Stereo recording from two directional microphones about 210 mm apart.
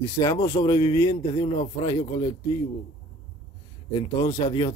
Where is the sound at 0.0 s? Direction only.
15° left (ahead or behind).